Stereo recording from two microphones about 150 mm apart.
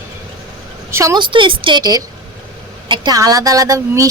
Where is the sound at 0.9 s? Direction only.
20° right (ahead or behind).